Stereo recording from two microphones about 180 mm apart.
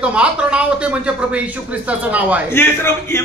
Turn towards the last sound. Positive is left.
turn(degrees=15)  # may be behind; listen again after turning